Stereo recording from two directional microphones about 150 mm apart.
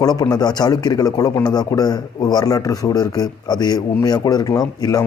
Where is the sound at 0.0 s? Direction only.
25° left (ahead or behind).